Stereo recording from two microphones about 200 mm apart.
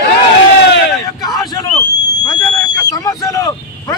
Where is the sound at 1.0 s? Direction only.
20° left (ahead or behind).